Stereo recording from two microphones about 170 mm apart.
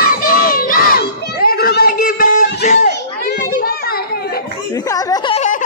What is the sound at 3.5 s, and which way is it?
Children playing, 60° left (ahead or behind).